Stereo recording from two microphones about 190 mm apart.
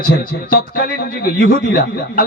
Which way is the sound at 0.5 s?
50° left (ahead or behind).